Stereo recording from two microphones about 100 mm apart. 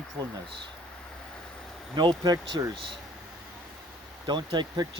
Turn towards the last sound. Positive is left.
turn(degrees=-50)  # may be behind; listen again after turning